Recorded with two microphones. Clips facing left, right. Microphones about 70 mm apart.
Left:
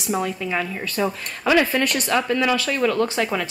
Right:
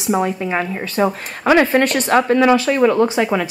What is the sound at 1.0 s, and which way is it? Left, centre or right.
Speech, right.